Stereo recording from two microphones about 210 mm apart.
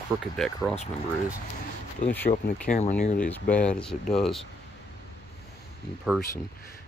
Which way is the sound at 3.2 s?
5° left (ahead or behind).